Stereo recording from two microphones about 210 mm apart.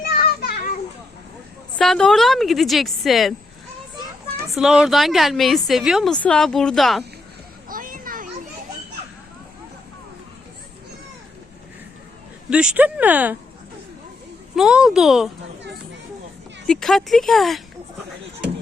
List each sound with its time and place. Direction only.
0.0 s children playing: 45° left (ahead or behind)
1.8 s a woman's voice: centre (ahead or behind)
4.5 s a woman's voice: centre (ahead or behind)
7.7 s children playing: 40° right (ahead or behind)
12.5 s speech: 5° right (ahead or behind)
14.5 s a woman's voice: 5° right (ahead or behind)
16.6 s a woman's voice: centre (ahead or behind)